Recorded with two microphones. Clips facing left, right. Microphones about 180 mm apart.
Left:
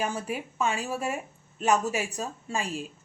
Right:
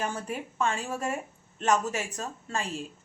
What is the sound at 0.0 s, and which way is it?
Speech, 10° left (ahead or behind).